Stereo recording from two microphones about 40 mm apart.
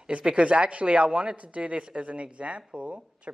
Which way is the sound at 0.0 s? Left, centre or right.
Right.